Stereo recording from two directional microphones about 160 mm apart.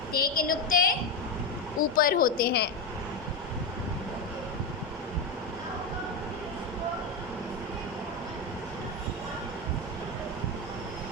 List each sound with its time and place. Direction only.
0.1 s a woman's voice: 65° left (ahead or behind)